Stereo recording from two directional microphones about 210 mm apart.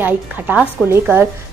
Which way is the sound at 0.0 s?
10° right (ahead or behind).